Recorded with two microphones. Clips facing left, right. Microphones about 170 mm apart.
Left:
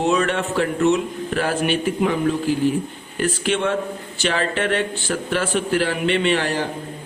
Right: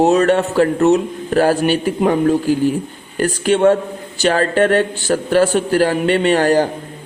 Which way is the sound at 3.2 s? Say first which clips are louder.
Right 7 dB; 40° right (ahead or behind).